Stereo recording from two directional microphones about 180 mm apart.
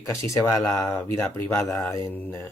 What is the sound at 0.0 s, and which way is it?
Speech, 15° left (ahead or behind).